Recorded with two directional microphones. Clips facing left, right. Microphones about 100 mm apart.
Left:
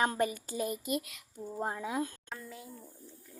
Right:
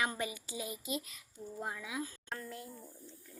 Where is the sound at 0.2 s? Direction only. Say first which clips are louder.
Left 8 dB; 50° left (ahead or behind).